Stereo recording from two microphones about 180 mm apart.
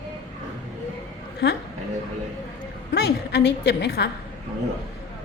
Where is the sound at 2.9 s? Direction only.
75° left (ahead or behind).